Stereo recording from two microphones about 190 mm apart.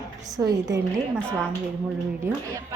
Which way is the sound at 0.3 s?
20° right (ahead or behind).